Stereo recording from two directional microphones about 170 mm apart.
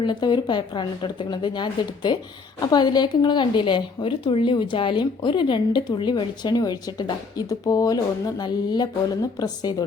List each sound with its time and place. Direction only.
0.0 s a woman's voice: 25° left (ahead or behind)